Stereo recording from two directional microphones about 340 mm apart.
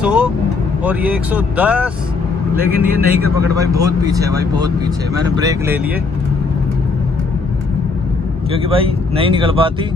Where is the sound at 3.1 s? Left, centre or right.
Right.